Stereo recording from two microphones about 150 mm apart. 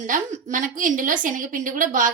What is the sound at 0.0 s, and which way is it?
A woman's voice, 60° right (ahead or behind).